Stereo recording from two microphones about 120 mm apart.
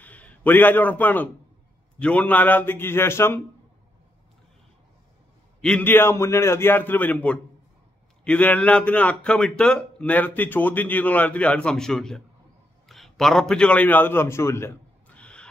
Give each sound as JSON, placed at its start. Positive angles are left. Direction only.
{"t": 0.0, "sound": "a man's voice", "side_deg": 10}
{"t": 5.6, "sound": "a man's voice", "side_deg": 10}
{"t": 15.1, "sound": "gasp", "side_deg": 10}